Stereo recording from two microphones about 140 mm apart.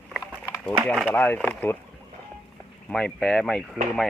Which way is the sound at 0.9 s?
5° left (ahead or behind).